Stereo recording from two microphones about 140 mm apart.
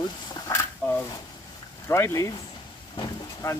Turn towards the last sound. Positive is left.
turn(degrees=30)  # may be behind; listen again after turning